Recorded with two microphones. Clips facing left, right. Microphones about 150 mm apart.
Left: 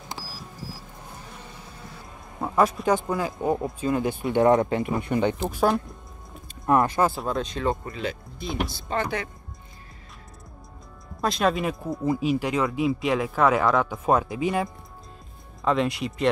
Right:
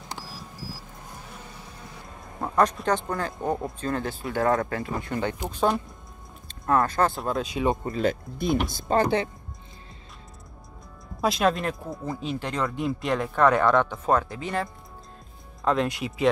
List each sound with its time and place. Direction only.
2.4 s speech: 5° left (ahead or behind)
5.5 s speech: 5° left (ahead or behind)
6.6 s speech: 15° left (ahead or behind); by 7.7 s 10° right (ahead or behind)
7.9 s speech: 45° right (ahead or behind)
11.1 s speech: 5° right (ahead or behind)
13.9 s speech: 15° left (ahead or behind)
15.6 s speech: centre (ahead or behind)